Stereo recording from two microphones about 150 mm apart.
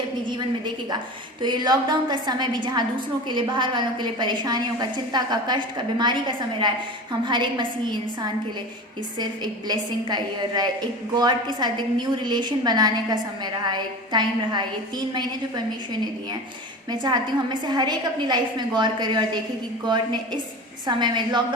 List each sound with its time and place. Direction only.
0.3 s a woman's voice: 30° right (ahead or behind)